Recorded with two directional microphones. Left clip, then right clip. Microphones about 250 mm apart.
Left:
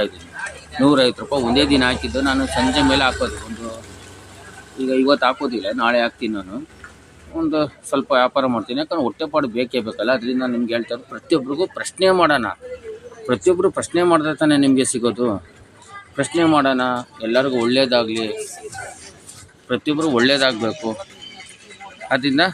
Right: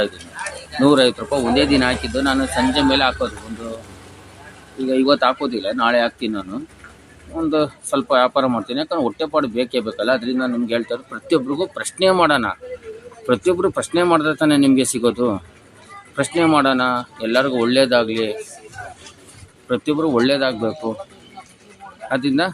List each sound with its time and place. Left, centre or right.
0.4 s a sound: right
0.8 s speech: centre
4.9 s speech: centre
18.8 s music: left
19.6 s speech: centre
22.1 s speech: centre